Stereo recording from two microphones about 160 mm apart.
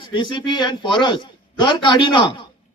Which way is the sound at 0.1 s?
30° left (ahead or behind).